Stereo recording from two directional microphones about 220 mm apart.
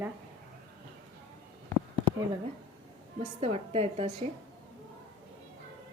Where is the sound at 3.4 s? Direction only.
25° right (ahead or behind).